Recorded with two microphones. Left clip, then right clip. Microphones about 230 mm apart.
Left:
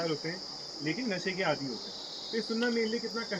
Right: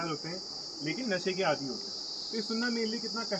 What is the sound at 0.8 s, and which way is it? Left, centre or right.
Cricket, centre.